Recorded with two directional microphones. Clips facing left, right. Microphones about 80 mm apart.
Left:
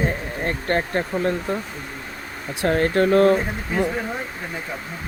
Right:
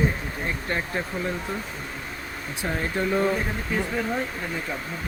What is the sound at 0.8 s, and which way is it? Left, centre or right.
Speech, left.